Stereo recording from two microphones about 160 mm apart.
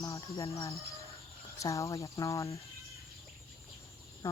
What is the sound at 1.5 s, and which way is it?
Speech, 20° left (ahead or behind).